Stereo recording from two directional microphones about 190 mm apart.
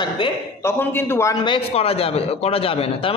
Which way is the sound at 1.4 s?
30° left (ahead or behind).